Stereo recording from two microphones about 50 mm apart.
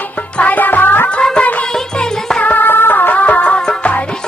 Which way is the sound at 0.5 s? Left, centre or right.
Left.